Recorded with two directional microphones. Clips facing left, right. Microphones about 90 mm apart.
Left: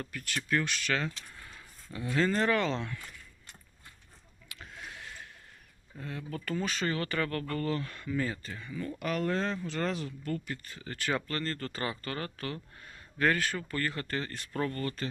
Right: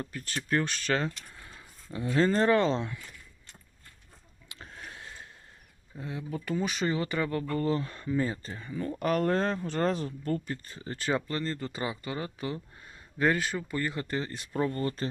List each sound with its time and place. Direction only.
0.0 s speech: 30° right (ahead or behind)
1.3 s a sound: 25° right (ahead or behind)
2.1 s speech: 35° right (ahead or behind)
4.4 s a sound: 35° right (ahead or behind)
6.0 s speech: 15° right (ahead or behind)
11.3 s speech: 15° right (ahead or behind)